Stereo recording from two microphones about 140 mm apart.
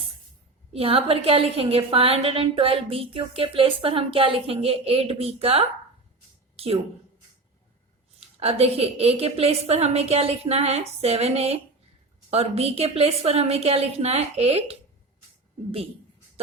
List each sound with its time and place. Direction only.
0.7 s a woman's voice: 40° right (ahead or behind)
8.4 s a woman's voice: 45° right (ahead or behind)